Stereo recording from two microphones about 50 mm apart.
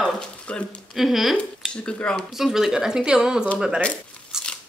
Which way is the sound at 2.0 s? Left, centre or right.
Centre.